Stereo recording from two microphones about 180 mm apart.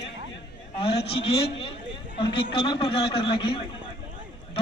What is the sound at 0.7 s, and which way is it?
A man's voice, 30° left (ahead or behind).